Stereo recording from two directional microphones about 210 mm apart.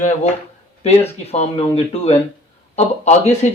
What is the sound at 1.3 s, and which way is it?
Speech, 30° left (ahead or behind).